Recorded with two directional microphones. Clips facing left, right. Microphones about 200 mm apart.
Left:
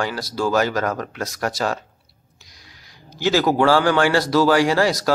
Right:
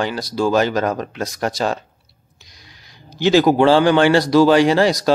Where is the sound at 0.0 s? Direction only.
20° right (ahead or behind).